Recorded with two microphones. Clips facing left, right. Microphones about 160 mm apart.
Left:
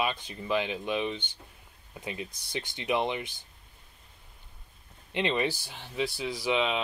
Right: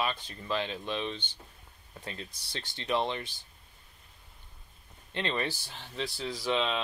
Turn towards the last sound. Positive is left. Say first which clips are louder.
# left 2 dB
turn(degrees=10)  # may be behind; listen again after turning